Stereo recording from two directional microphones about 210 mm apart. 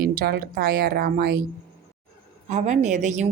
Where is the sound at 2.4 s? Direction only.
35° right (ahead or behind).